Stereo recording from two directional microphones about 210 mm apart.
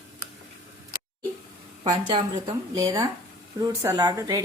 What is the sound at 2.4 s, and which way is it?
Speech, 15° right (ahead or behind).